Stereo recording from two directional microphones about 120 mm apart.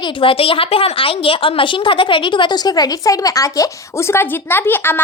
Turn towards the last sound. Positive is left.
turn(degrees=15)  # may be behind; listen again after turning